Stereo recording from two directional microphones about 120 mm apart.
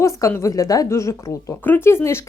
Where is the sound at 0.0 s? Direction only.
25° left (ahead or behind).